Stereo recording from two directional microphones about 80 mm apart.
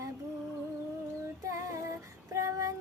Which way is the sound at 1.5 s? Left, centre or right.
Right.